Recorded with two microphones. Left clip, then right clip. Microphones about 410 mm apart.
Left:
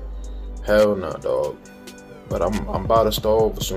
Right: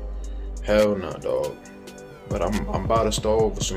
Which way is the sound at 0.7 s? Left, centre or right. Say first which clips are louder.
Left 3 dB; centre.